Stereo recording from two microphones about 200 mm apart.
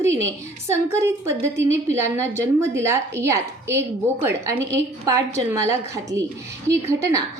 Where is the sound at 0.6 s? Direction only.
15° right (ahead or behind).